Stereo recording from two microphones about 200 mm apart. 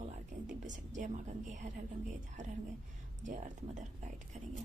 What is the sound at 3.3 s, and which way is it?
Speech, 35° right (ahead or behind).